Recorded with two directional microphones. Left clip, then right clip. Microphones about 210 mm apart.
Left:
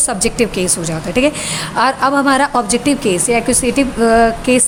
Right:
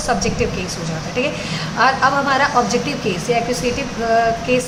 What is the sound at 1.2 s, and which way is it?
A woman's voice, 55° left (ahead or behind).